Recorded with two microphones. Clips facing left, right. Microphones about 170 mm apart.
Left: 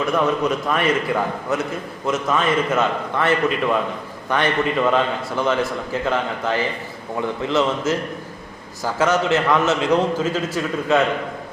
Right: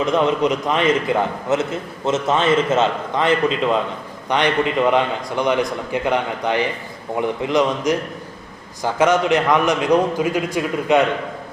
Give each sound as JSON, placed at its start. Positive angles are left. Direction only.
{"t": 0.0, "sound": "a man's voice", "side_deg": -20}